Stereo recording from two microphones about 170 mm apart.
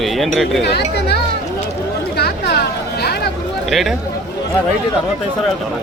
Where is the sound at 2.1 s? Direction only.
70° left (ahead or behind).